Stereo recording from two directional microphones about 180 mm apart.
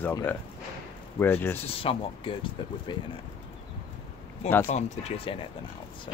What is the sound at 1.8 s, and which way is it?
Speech, 30° left (ahead or behind).